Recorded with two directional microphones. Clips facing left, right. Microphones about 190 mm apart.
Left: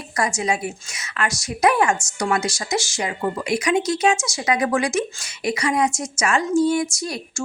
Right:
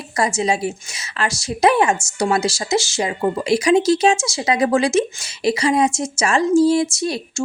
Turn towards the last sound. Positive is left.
turn(degrees=-25)  # may be behind; listen again after turning